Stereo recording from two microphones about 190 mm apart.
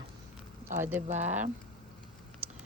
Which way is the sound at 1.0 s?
40° right (ahead or behind).